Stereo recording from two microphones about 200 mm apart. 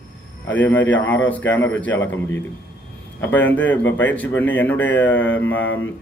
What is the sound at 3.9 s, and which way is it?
Speech, 70° left (ahead or behind).